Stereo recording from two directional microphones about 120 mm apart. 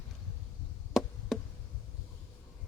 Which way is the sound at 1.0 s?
Centre (ahead or behind).